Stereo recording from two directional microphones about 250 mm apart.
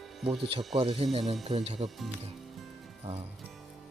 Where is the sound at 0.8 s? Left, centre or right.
Right.